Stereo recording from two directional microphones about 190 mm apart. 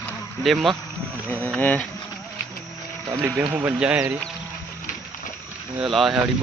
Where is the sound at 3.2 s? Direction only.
15° right (ahead or behind).